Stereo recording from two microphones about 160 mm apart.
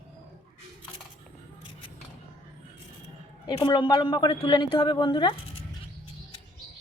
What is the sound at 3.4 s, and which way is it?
Speech, 30° left (ahead or behind).